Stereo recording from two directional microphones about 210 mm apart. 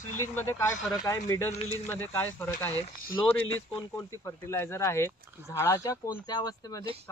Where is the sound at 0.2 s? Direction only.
15° left (ahead or behind).